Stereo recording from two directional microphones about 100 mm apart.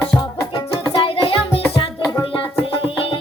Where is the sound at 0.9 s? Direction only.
65° left (ahead or behind).